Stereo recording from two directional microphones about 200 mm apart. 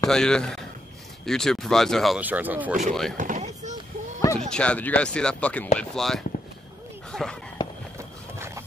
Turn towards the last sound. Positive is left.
turn(degrees=5)  # may be behind; listen again after turning